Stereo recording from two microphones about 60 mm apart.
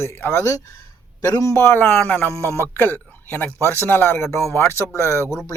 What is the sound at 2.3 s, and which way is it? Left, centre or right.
Speech, right.